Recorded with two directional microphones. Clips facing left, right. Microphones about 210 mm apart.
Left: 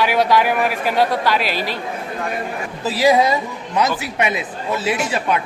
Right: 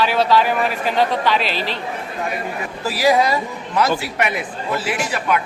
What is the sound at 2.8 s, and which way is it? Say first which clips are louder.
A woman's voice: left 2 dB; 20° left (ahead or behind).